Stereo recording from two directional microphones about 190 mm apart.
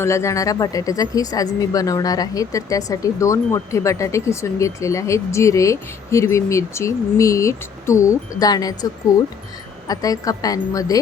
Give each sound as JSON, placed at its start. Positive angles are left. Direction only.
{"t": 0.0, "sound": "a woman's voice", "side_deg": 15}